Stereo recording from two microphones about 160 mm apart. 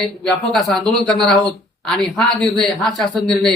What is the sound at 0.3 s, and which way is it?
Speech, centre (ahead or behind).